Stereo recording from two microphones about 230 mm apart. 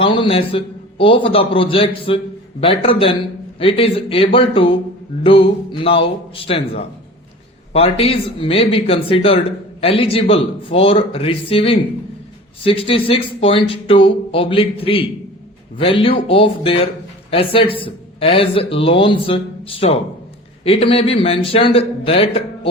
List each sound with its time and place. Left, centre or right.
0.0 s a man's voice: left